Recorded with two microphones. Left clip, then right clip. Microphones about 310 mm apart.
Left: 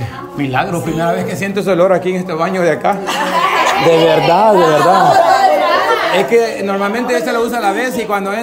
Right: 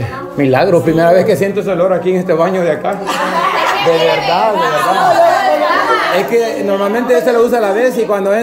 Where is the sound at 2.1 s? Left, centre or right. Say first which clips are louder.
Right 4 dB; centre.